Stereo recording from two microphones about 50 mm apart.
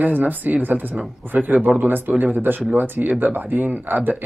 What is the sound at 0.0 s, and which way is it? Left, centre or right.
Speech, right.